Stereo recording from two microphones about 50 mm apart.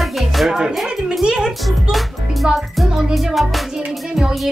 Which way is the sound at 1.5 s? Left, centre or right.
Centre.